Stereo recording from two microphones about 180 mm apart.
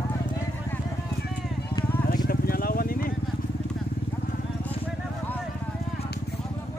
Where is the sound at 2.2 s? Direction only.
55° left (ahead or behind).